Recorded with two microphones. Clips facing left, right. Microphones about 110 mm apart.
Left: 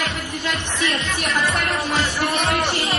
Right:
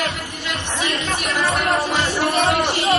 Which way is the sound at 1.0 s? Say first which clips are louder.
Right 1 dB; 35° right (ahead or behind).